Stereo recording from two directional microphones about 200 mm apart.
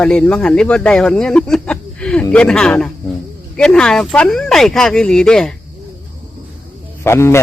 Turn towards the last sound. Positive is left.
turn(degrees=15)  # may be behind; listen again after turning